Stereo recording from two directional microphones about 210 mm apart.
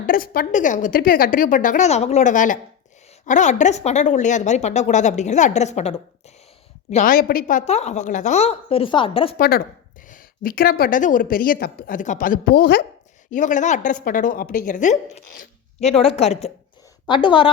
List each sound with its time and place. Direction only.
0.1 s speech: 40° left (ahead or behind); by 9.3 s 25° left (ahead or behind)
9.4 s a woman's voice: 45° left (ahead or behind); by 17.5 s 25° left (ahead or behind)